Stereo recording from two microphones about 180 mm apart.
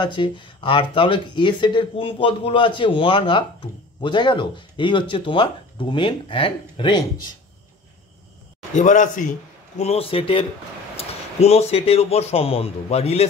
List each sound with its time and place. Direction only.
0.0 s speech: 25° left (ahead or behind)
8.7 s a man's voice: 45° left (ahead or behind)
9.8 s a man's voice: 35° left (ahead or behind)